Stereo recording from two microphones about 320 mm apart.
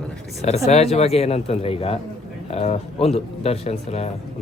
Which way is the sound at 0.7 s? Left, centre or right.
Centre.